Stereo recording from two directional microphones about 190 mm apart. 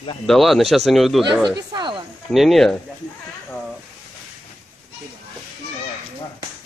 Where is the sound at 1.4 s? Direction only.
20° right (ahead or behind).